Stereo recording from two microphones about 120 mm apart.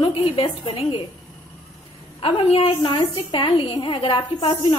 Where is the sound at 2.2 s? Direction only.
55° left (ahead or behind).